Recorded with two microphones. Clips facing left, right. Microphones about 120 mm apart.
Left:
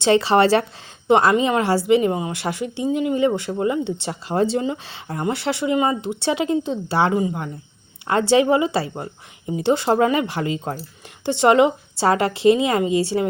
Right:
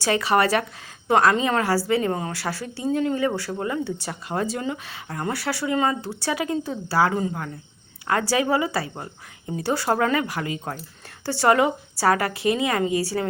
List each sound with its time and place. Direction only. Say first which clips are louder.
0.0 s a woman's voice: left 5 dB; 30° left (ahead or behind)